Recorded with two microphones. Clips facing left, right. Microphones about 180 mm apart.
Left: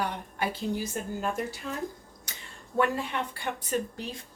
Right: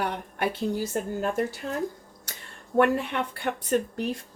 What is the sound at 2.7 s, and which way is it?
A woman's voice, 60° right (ahead or behind).